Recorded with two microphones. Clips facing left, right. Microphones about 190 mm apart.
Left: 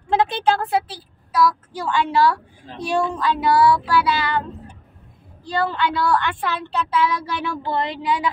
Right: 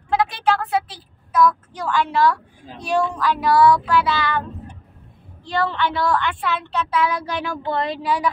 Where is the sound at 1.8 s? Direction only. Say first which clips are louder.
Even; 30° left (ahead or behind).